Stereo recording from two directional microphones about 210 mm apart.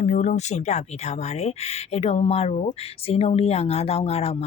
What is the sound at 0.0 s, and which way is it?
Speech, 35° left (ahead or behind).